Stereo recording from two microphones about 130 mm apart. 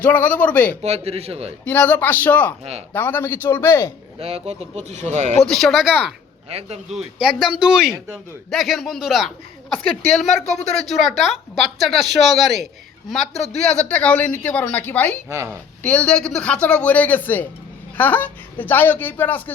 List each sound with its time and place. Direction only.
0.0 s a man's voice: 10° left (ahead or behind)
0.8 s speech: 55° right (ahead or behind)
1.6 s a man's voice: 10° left (ahead or behind)
4.2 s speech: 50° right (ahead or behind)
5.5 s speech: centre (ahead or behind)
6.5 s speech: 50° right (ahead or behind)
6.9 s a man's voice: 5° right (ahead or behind); by 15.2 s 15° left (ahead or behind)
15.3 s a woman's voice: 20° right (ahead or behind)
15.8 s a man's voice: 10° left (ahead or behind)